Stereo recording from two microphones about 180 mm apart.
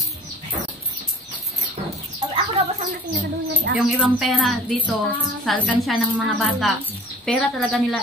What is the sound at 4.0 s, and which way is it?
A woman's voice, centre (ahead or behind).